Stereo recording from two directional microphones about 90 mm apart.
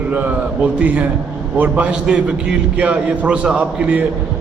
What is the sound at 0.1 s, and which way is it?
A man's voice, 15° right (ahead or behind).